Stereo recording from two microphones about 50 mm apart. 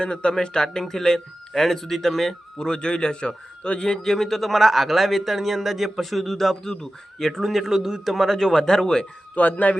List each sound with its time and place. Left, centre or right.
0.0 s speech: left
9.3 s speech: left